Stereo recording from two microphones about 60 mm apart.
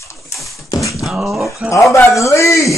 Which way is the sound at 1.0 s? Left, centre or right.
Centre.